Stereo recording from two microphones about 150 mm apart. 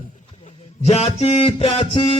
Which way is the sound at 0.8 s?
45° left (ahead or behind).